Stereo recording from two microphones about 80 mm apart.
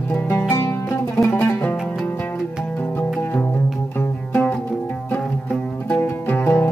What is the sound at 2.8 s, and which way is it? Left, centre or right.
Music, centre.